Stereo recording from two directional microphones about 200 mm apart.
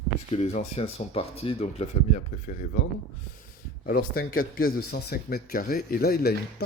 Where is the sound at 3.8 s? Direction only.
50° left (ahead or behind).